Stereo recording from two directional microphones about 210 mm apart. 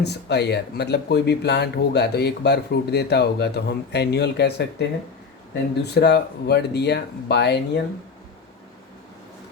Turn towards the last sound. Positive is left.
turn(degrees=50)  # may be behind; listen again after turning